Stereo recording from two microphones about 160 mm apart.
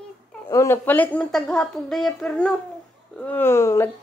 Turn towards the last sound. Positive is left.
turn(degrees=15)  # may be behind; listen again after turning